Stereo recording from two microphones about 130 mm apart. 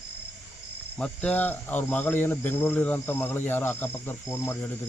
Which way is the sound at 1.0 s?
10° left (ahead or behind).